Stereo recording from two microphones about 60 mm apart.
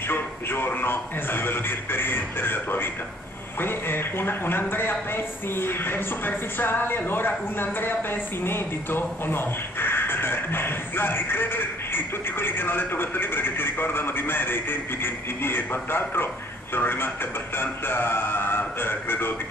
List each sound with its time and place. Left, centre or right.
0.1 s a man's voice: left